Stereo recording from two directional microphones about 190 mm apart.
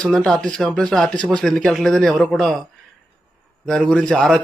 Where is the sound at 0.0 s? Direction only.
5° left (ahead or behind).